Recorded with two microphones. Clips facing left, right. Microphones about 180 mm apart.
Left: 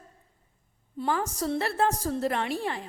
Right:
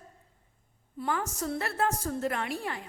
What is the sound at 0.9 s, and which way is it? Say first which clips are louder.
A woman's voice: left 3 dB; 30° left (ahead or behind).